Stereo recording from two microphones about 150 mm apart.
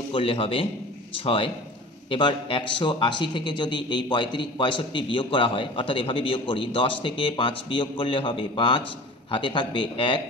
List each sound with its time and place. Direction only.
0.1 s a man's voice: 40° left (ahead or behind)